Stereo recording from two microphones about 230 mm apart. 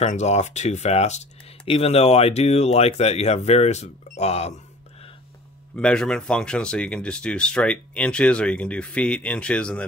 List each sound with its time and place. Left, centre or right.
0.0 s speech: left
5.8 s speech: centre